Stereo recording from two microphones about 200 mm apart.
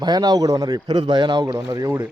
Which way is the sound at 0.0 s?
20° right (ahead or behind).